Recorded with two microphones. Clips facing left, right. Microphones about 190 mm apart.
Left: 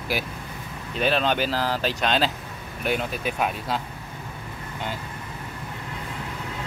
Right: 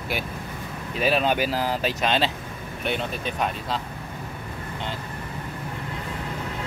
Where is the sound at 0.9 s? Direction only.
5° right (ahead or behind).